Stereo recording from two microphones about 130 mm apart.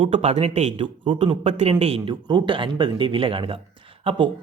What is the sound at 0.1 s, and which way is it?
Speech, 55° right (ahead or behind).